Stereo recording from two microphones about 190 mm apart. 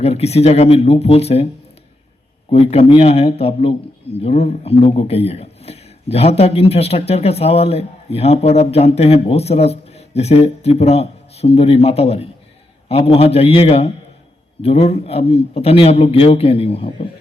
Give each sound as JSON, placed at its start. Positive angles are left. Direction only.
{"t": 0.0, "sound": "speech", "side_deg": 35}
{"t": 2.5, "sound": "speech", "side_deg": 30}